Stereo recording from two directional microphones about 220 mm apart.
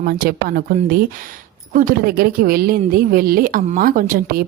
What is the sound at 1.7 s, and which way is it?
A woman's voice, 35° right (ahead or behind).